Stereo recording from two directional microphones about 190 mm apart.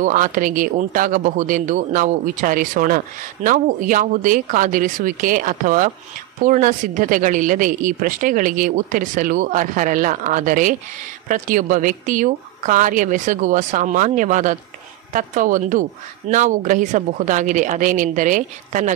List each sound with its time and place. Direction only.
0.0 s a woman's voice: 45° right (ahead or behind)